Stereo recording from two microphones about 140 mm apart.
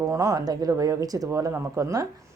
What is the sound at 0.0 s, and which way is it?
Speech, 25° right (ahead or behind).